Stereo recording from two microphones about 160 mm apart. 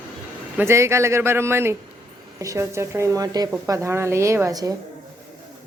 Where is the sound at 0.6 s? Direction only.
15° right (ahead or behind).